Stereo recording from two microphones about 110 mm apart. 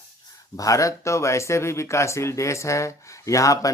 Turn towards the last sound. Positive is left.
turn(degrees=30)  # may be behind; listen again after turning